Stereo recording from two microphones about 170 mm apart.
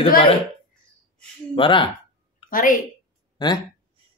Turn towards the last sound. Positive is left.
turn(degrees=25)  # may be behind; listen again after turning